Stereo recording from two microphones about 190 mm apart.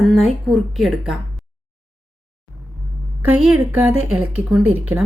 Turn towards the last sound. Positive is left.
turn(degrees=-5)  # may be behind; listen again after turning